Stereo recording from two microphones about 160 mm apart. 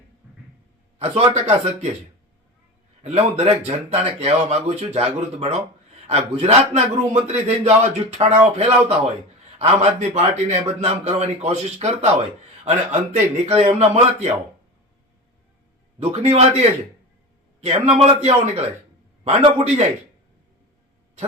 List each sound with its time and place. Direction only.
0.9 s a man's voice: 40° right (ahead or behind)
3.0 s a man's voice: 40° right (ahead or behind)
16.0 s a man's voice: 40° right (ahead or behind)